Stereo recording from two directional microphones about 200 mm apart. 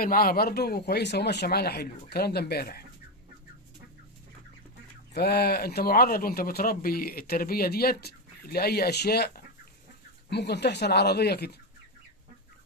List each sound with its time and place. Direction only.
0.0 s speech: 45° left (ahead or behind)
5.1 s speech: 55° left (ahead or behind)